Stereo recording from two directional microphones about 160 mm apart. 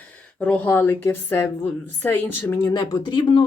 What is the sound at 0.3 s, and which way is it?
A woman's voice, 10° left (ahead or behind).